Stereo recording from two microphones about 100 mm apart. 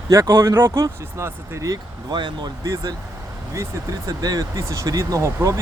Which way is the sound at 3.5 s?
35° right (ahead or behind).